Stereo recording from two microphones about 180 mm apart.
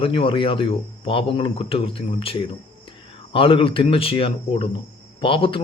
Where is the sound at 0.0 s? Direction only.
30° left (ahead or behind).